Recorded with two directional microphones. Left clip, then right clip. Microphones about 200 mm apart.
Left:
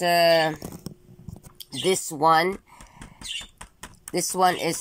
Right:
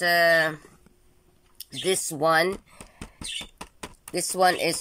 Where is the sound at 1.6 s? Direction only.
5° right (ahead or behind).